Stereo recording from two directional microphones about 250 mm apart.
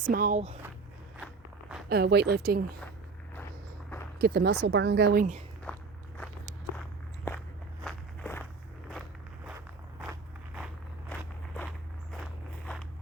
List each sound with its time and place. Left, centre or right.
0.0 s a woman's voice: right
1.9 s a woman's voice: right
4.2 s a woman's voice: right
5.7 s walk: centre
7.3 s walk: centre
9.6 s walk: centre
12.1 s walk: centre